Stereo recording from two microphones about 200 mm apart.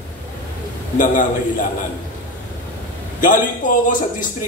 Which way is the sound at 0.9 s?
40° left (ahead or behind).